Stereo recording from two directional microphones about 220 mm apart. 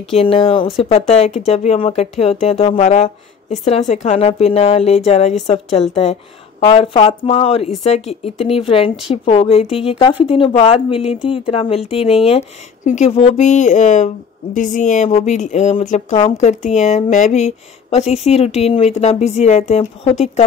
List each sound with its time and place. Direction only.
0.1 s speech: 25° left (ahead or behind)